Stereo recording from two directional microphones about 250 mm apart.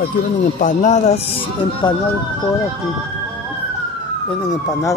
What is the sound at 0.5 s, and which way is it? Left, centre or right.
Speech, left.